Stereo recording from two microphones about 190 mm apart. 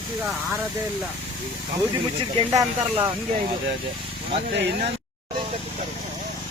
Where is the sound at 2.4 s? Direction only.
35° right (ahead or behind).